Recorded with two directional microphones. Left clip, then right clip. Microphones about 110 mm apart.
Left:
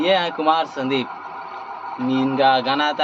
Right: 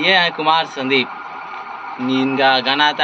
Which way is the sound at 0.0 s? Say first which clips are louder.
Right 4 dB; 15° left (ahead or behind).